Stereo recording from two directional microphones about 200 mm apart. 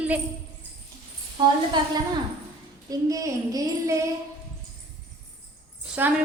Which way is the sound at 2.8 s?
15° right (ahead or behind).